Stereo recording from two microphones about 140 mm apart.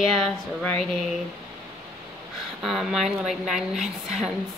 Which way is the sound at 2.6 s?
Centre (ahead or behind).